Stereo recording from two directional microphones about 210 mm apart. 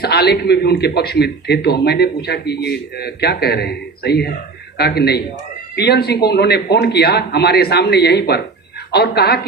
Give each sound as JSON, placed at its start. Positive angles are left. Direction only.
{"t": 0.0, "sound": "a man's voice", "side_deg": 50}